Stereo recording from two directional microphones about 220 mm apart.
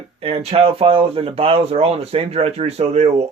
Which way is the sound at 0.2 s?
25° right (ahead or behind).